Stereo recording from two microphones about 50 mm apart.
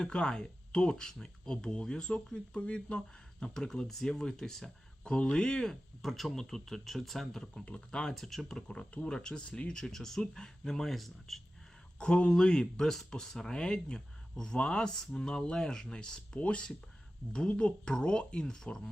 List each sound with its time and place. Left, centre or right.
0.0 s speech: centre
6.0 s speech: centre
7.6 s speech: centre
11.9 s speech: centre